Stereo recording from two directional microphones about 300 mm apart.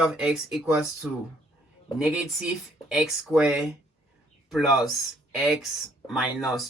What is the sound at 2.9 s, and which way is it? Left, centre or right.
Speech, centre.